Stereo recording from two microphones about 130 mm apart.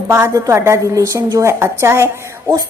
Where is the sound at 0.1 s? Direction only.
20° right (ahead or behind).